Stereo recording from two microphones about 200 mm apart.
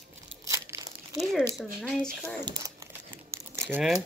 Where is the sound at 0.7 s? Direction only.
10° right (ahead or behind).